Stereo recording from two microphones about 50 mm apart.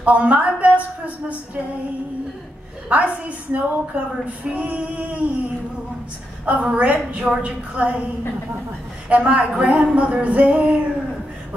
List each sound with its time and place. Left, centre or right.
0.0 s a woman's voice: right
2.9 s a woman's voice: right
6.4 s a woman's voice: right
9.1 s a woman's voice: right